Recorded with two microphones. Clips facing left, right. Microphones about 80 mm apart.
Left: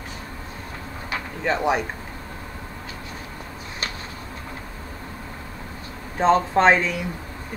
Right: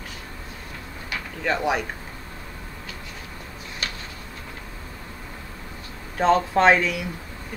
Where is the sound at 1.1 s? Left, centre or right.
Left.